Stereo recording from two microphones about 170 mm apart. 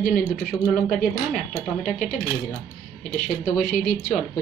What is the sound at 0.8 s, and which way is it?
Speech, 50° left (ahead or behind).